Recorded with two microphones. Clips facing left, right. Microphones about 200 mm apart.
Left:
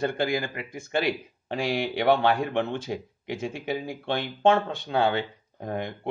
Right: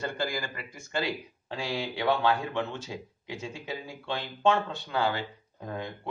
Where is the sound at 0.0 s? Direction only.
60° left (ahead or behind).